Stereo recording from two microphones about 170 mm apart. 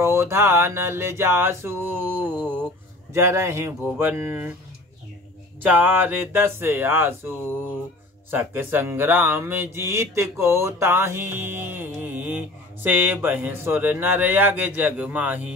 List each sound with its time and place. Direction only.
0.0 s speech: 15° right (ahead or behind)
2.4 s a sound: 5° left (ahead or behind)
3.1 s speech: 15° right (ahead or behind)
5.6 s speech: 10° right (ahead or behind)